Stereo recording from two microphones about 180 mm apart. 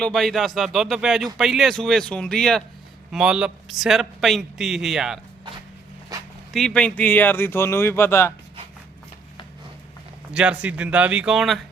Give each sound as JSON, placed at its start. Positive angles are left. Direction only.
{"t": 0.0, "sound": "a man's voice", "side_deg": 0}
{"t": 6.1, "sound": "dog", "side_deg": -20}
{"t": 6.5, "sound": "speech", "side_deg": 0}
{"t": 10.3, "sound": "speech", "side_deg": -5}